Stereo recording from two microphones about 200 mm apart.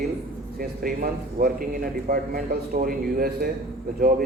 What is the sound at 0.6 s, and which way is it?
A man's voice, 45° right (ahead or behind).